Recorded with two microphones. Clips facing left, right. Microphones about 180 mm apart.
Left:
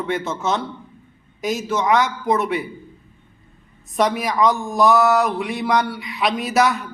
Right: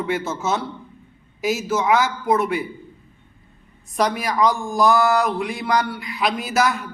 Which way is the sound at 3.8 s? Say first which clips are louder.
Left 2 dB; centre (ahead or behind).